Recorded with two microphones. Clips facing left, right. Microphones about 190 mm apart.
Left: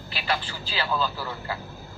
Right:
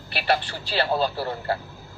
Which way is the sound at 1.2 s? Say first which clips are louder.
Right 6 dB; 35° right (ahead or behind).